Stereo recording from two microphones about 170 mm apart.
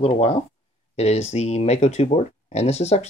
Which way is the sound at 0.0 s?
35° left (ahead or behind).